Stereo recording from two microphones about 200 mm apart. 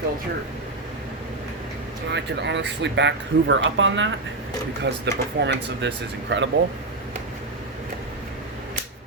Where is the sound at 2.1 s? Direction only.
60° right (ahead or behind).